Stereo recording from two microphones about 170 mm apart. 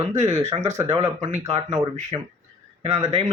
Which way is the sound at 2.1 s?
30° right (ahead or behind).